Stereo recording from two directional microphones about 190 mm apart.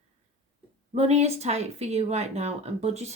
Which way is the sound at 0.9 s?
35° right (ahead or behind).